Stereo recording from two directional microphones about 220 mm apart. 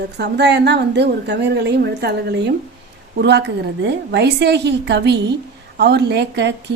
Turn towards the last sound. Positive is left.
turn(degrees=-50)  # may be behind; listen again after turning